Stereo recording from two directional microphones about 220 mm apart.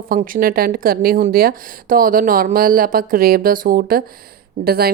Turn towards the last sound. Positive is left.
turn(degrees=-45)  # may be behind; listen again after turning